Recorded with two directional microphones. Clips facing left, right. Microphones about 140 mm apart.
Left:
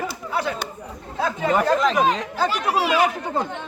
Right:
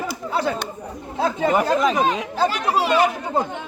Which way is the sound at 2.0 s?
5° right (ahead or behind).